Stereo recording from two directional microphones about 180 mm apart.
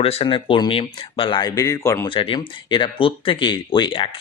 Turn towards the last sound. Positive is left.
turn(degrees=30)  # may be behind; listen again after turning